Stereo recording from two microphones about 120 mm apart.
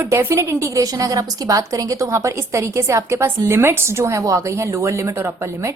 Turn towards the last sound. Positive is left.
turn(degrees=-20)  # may be behind; listen again after turning